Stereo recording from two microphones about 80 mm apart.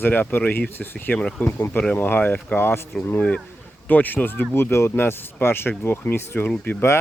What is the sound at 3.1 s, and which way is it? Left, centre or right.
Speech, centre.